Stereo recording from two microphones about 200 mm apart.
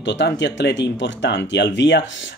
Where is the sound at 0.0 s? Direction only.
60° left (ahead or behind).